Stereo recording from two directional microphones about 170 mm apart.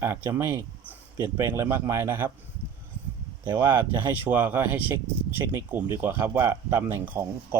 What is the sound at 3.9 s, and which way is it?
Speech, 10° right (ahead or behind).